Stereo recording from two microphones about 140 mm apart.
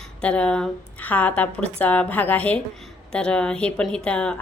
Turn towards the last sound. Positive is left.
turn(degrees=5)  # may be behind; listen again after turning